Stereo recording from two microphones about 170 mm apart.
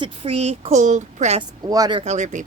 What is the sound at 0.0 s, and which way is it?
Speech, 35° right (ahead or behind).